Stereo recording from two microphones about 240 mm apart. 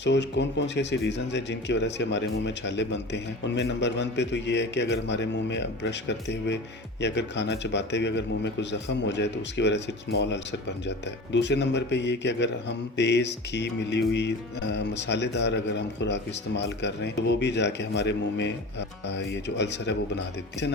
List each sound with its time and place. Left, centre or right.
0.0 s speech: left